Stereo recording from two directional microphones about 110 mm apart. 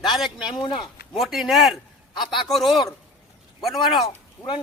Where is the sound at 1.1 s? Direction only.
Centre (ahead or behind).